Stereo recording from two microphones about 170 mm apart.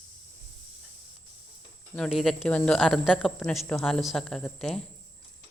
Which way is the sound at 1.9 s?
Centre (ahead or behind).